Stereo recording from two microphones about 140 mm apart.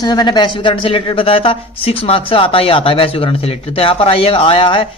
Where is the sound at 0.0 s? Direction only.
30° left (ahead or behind).